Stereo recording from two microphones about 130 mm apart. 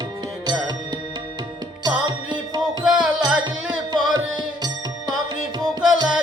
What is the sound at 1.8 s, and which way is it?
Music, 35° right (ahead or behind).